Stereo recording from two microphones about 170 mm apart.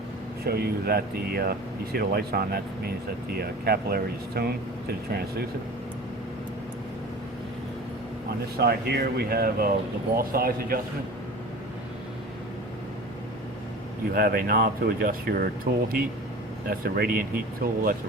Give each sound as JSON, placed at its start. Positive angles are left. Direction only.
{"t": 0.4, "sound": "speech", "side_deg": -65}
{"t": 8.5, "sound": "speech", "side_deg": -70}
{"t": 14.1, "sound": "speech", "side_deg": -60}
{"t": 16.6, "sound": "speech", "side_deg": -60}